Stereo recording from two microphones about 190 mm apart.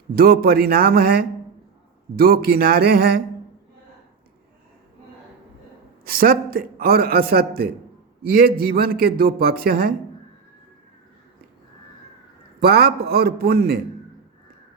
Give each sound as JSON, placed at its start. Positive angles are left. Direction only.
{"t": 0.2, "sound": "a man's voice", "side_deg": -55}
{"t": 6.1, "sound": "a man's voice", "side_deg": -50}
{"t": 12.5, "sound": "a man's voice", "side_deg": -55}